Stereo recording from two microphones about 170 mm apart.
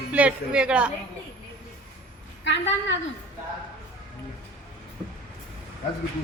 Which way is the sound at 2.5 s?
90° left.